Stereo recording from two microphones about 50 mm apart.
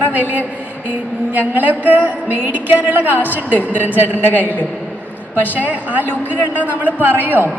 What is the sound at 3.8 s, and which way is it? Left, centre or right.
Speech, right.